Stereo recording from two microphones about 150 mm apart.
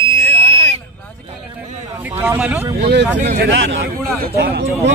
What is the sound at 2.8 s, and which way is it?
Speech, 50° right (ahead or behind).